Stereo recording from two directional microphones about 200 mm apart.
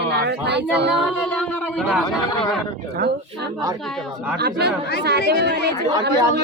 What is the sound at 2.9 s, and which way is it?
Speech, 50° right (ahead or behind).